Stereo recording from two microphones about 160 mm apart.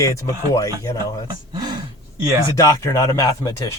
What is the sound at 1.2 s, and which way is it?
Speech, 25° right (ahead or behind).